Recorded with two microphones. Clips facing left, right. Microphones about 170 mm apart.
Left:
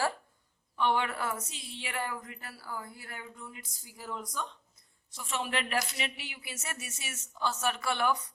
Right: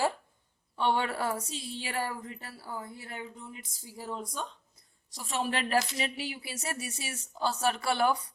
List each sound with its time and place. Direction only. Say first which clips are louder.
0.8 s a woman's voice: right 1 dB; 30° right (ahead or behind)